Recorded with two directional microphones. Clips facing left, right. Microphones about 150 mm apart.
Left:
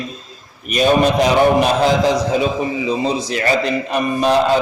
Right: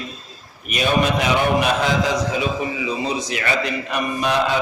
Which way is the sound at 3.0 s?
35° left (ahead or behind).